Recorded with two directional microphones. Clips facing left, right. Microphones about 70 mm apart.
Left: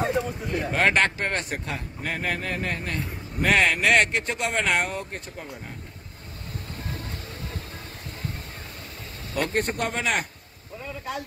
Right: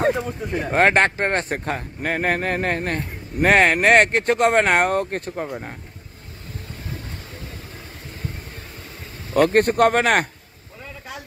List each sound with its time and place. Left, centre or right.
0.5 s speech: right
9.3 s speech: right